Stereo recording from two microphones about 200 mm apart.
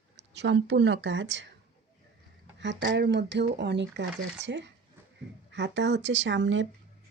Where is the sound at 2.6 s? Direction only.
60° right (ahead or behind).